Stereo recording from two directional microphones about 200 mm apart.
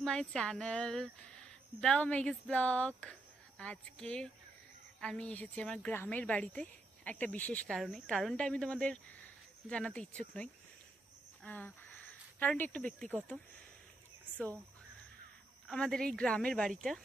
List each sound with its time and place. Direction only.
0.0 s a woman's voice: centre (ahead or behind)
11.4 s a sound: 10° left (ahead or behind)
12.7 s a woman's voice: 5° left (ahead or behind)
15.7 s a woman's voice: 5° left (ahead or behind)